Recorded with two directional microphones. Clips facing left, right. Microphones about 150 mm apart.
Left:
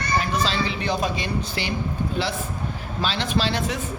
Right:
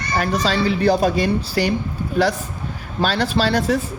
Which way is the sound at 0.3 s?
40° right (ahead or behind).